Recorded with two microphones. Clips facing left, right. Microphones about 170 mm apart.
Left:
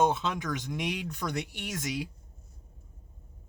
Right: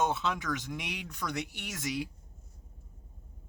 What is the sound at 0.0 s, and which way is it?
Speech, 20° left (ahead or behind).